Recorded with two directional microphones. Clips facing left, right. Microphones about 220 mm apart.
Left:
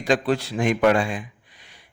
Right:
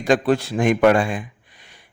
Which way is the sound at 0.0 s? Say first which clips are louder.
Right 4 dB; 50° right (ahead or behind).